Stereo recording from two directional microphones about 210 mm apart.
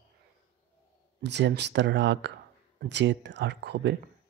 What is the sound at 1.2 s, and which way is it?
Speech, 55° right (ahead or behind).